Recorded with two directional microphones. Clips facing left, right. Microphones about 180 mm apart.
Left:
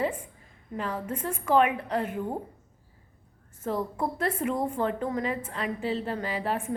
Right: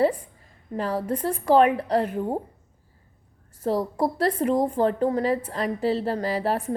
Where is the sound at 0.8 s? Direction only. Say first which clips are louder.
Right 6 dB; 35° right (ahead or behind).